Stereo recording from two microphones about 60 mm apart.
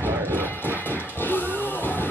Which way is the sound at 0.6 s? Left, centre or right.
Left.